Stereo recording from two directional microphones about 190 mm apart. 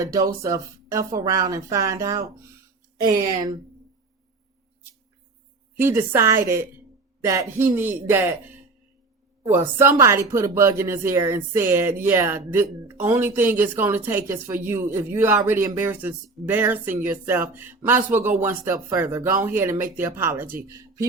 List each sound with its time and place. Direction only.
0.0 s speech: 15° right (ahead or behind)
5.8 s speech: 15° right (ahead or behind)